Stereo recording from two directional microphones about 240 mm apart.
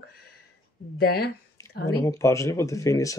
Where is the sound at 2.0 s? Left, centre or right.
Centre.